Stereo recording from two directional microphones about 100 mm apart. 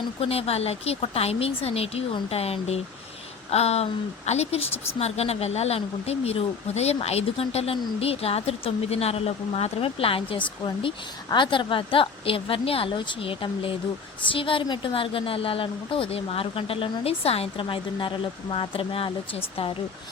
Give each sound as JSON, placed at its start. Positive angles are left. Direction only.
{"t": 0.2, "sound": "a woman's voice", "side_deg": 80}